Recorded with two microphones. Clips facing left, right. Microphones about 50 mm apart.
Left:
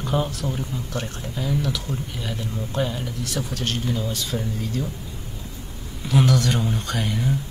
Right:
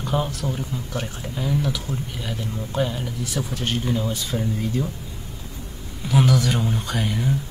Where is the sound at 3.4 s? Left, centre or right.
Centre.